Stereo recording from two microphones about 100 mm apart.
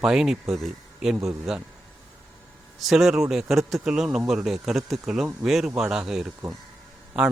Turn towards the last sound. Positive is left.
turn(degrees=-5)  # may be behind; listen again after turning